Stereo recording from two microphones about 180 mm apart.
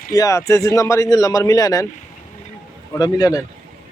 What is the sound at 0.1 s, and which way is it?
A man's voice, 20° left (ahead or behind).